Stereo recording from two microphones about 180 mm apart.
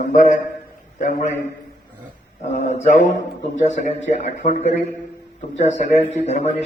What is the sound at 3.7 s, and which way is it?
A man's voice, 40° left (ahead or behind).